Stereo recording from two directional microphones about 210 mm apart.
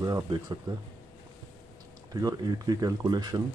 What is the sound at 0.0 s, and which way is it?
Speech, 20° right (ahead or behind).